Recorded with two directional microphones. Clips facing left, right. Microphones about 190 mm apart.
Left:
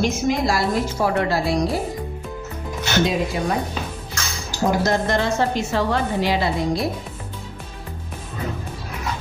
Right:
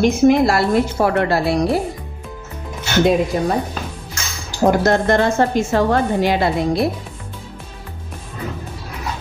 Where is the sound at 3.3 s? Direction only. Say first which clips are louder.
Right 5 dB; 40° right (ahead or behind).